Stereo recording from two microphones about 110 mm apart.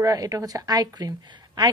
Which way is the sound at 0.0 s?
30° right (ahead or behind).